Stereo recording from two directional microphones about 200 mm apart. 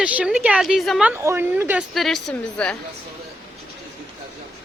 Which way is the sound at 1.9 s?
Centre (ahead or behind).